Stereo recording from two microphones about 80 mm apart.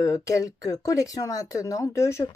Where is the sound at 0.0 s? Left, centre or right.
Left.